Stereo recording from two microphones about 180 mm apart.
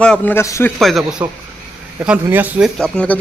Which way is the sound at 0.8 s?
Centre (ahead or behind).